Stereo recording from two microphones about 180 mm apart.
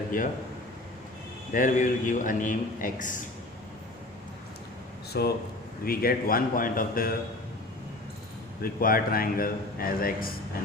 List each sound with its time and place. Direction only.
1.5 s a man's voice: 45° left (ahead or behind)
5.1 s a man's voice: 65° left (ahead or behind)
8.6 s a man's voice: 55° left (ahead or behind)